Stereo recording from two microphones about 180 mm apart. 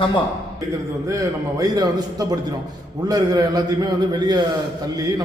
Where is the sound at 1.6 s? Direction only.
20° right (ahead or behind).